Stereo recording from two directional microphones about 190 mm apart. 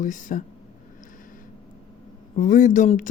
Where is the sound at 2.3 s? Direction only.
40° left (ahead or behind).